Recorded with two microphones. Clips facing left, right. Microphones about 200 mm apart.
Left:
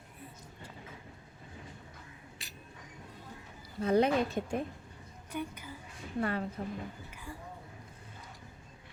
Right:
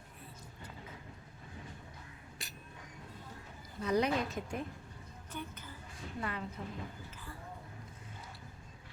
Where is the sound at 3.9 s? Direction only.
25° left (ahead or behind).